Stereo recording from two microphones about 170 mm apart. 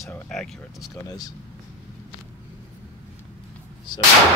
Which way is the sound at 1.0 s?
20° left (ahead or behind).